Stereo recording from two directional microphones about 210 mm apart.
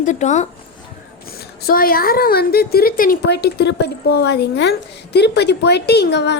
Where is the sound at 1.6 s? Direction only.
45° left (ahead or behind).